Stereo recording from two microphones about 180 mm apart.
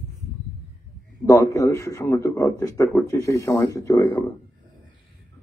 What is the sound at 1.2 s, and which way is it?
A man's voice, 15° left (ahead or behind).